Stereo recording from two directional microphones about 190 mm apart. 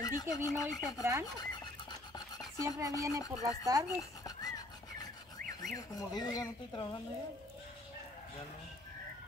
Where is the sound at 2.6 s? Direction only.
15° right (ahead or behind).